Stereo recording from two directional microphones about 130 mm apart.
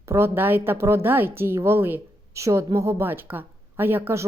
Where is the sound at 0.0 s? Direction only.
20° right (ahead or behind).